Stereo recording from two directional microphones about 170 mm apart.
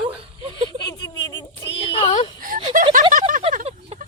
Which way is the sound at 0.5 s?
25° left (ahead or behind).